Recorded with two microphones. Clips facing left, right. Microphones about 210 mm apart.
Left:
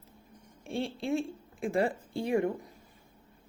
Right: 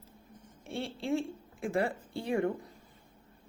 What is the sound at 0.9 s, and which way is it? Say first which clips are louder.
Speech: left 1 dB; 15° left (ahead or behind).